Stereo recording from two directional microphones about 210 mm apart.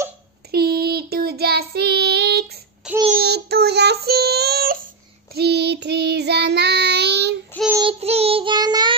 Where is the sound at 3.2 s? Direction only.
50° right (ahead or behind).